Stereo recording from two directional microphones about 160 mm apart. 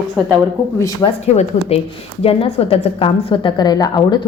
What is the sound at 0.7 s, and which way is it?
Speech, 20° left (ahead or behind).